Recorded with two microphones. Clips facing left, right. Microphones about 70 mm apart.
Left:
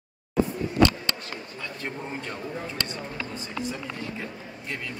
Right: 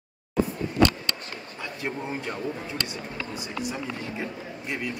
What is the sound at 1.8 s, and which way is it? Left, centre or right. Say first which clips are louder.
Speech: right 4 dB; centre.